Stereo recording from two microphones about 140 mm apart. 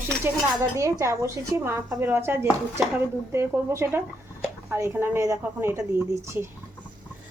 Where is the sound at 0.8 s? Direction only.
20° right (ahead or behind).